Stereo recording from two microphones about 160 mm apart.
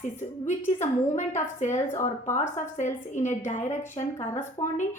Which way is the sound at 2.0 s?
45° left (ahead or behind).